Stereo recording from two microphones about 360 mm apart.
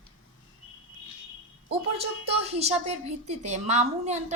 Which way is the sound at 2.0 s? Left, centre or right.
Centre.